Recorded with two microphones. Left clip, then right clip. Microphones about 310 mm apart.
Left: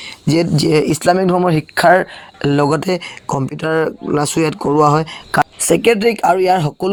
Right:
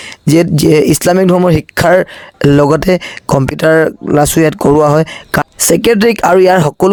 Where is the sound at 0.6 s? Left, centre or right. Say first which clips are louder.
Right 3 dB; right.